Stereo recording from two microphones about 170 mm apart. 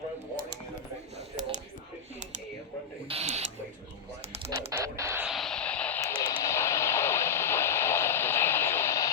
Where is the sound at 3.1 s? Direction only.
40° right (ahead or behind).